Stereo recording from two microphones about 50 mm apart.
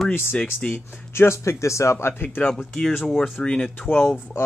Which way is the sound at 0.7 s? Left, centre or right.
Left.